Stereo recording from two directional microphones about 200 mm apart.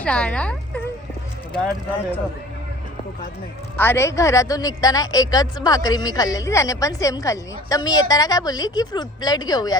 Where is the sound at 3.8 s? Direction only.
10° left (ahead or behind).